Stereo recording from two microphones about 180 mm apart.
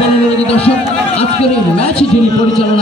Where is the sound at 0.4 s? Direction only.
35° left (ahead or behind).